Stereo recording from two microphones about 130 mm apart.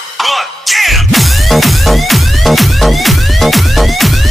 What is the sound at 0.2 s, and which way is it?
Music, centre (ahead or behind).